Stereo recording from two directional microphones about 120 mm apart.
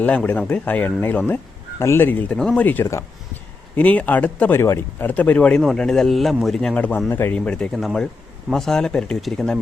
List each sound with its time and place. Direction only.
0.0 s speech: 10° left (ahead or behind)